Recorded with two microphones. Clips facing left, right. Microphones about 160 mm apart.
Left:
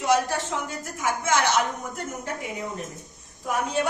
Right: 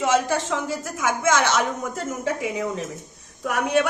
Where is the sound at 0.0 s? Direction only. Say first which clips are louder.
Right 2 dB; 90° right.